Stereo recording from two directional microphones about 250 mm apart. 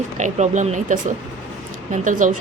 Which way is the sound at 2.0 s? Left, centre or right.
Right.